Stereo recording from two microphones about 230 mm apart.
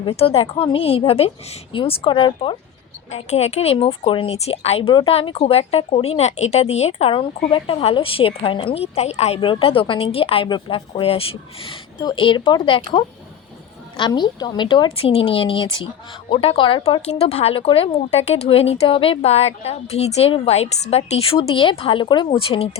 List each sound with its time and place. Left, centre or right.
0.0 s speech: left
13.9 s speech: centre